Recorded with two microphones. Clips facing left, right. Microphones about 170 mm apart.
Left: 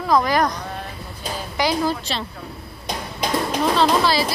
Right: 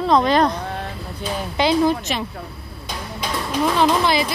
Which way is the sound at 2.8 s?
40° left (ahead or behind).